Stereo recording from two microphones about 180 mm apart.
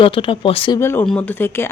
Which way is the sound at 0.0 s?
30° left (ahead or behind).